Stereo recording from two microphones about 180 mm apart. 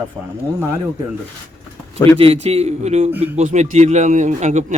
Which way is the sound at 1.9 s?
15° left (ahead or behind).